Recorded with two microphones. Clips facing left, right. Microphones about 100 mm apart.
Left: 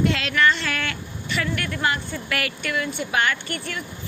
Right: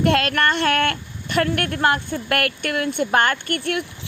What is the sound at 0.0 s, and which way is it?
A woman's voice, 55° right (ahead or behind).